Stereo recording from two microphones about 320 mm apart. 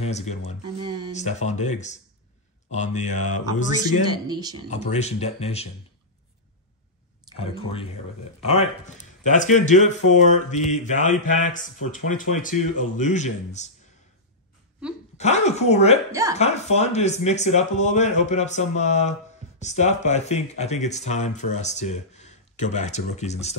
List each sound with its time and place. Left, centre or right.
0.0 s speech: left
4.3 s speech: centre
4.6 s speech: left
7.3 s speech: centre
15.1 s speech: left
16.1 s speech: centre
16.3 s speech: left